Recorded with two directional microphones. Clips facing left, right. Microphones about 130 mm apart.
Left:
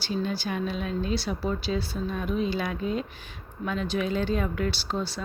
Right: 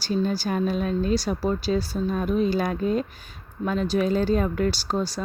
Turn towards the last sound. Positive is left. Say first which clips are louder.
# right 4 dB
turn(degrees=-40)  # may be behind; listen again after turning